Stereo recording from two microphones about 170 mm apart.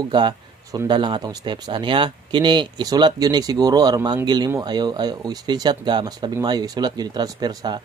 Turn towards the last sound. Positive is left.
turn(degrees=-25)  # may be behind; listen again after turning